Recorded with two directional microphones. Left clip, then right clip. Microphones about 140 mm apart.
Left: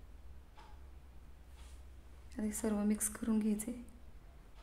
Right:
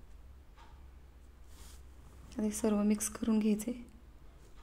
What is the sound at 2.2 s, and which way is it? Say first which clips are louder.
A woman's voice: right 5 dB; 15° right (ahead or behind).